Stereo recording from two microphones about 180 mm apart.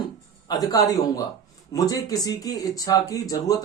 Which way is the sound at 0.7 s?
20° left (ahead or behind).